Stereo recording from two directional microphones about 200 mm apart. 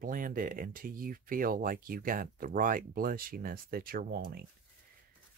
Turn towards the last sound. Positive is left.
turn(degrees=-50)  # may be behind; listen again after turning